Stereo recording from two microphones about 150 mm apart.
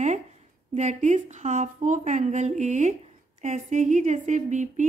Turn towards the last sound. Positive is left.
turn(degrees=-55)  # may be behind; listen again after turning